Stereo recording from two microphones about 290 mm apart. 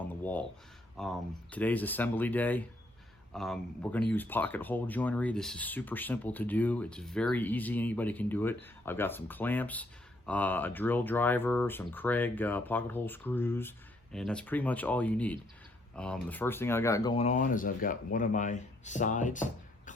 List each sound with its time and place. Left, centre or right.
0.2 s speech: centre; by 19.9 s left